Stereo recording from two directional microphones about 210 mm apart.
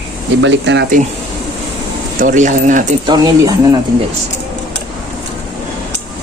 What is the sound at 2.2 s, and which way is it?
Speech, 35° right (ahead or behind).